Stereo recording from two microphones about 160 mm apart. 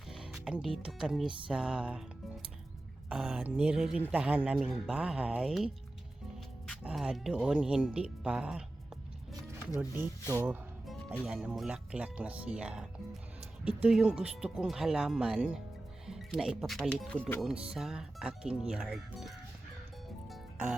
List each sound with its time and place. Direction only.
0.1 s speech: centre (ahead or behind)
3.1 s speech: 5° right (ahead or behind)
6.8 s speech: 5° right (ahead or behind)
10.2 s speech: 15° right (ahead or behind); by 17.4 s 10° left (ahead or behind)
17.7 s speech: 5° right (ahead or behind)
20.3 s music: 5° right (ahead or behind)